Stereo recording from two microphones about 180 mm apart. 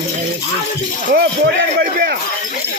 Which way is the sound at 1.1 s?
60° right (ahead or behind).